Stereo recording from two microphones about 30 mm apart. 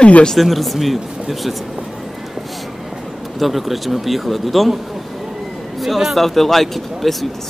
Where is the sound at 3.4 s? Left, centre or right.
Centre.